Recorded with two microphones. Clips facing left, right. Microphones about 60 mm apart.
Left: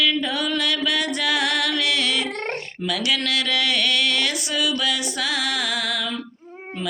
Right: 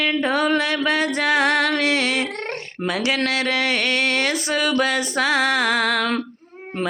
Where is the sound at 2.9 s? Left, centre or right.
Right.